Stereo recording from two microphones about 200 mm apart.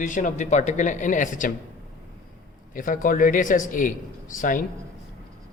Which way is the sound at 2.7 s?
40° left (ahead or behind).